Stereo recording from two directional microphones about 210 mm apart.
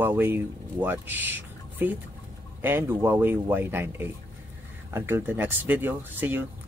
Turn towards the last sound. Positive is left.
turn(degrees=-10)  # may be behind; listen again after turning